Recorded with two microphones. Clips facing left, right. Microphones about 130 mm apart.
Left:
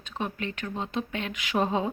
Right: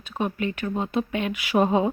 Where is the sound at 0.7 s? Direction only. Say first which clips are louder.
Right 5 dB; 50° right (ahead or behind).